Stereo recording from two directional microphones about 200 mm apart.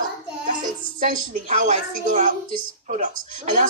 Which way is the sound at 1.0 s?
40° right (ahead or behind).